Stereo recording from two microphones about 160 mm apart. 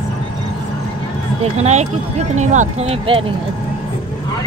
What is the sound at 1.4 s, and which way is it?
Speech, 45° right (ahead or behind).